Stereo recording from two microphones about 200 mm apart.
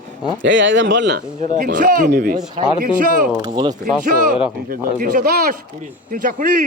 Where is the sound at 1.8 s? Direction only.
50° right (ahead or behind).